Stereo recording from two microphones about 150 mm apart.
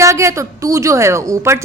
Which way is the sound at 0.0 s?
20° right (ahead or behind).